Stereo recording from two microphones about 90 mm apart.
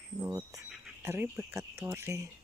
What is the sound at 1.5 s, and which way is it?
Cricket, 30° right (ahead or behind).